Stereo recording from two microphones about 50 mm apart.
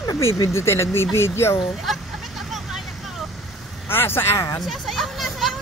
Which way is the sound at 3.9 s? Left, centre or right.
Left.